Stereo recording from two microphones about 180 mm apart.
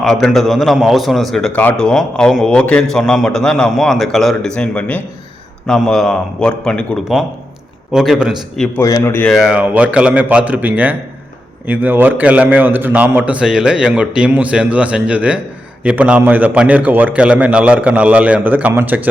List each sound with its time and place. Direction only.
0.0 s a man's voice: centre (ahead or behind)
8.8 s speech: 20° left (ahead or behind)
9.3 s a man's voice: 5° right (ahead or behind)